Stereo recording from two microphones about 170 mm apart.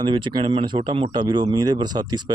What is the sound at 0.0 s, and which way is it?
Speech, 25° right (ahead or behind).